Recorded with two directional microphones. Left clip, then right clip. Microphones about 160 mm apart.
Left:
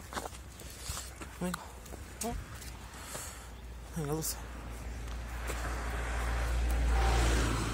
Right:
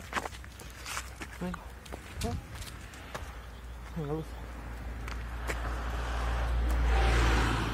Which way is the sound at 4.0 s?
35° left (ahead or behind).